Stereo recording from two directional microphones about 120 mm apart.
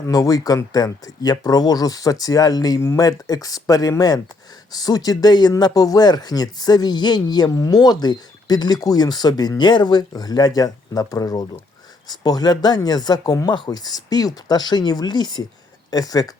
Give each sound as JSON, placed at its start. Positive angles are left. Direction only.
{"t": 0.1, "sound": "speech", "side_deg": 30}